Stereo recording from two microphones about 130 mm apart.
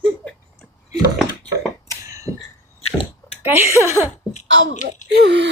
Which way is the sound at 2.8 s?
55° left (ahead or behind).